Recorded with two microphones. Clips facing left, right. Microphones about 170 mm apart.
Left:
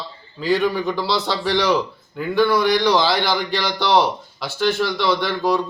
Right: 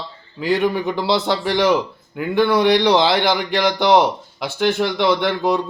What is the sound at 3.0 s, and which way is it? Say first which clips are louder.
A man's voice: right 3 dB; 20° right (ahead or behind).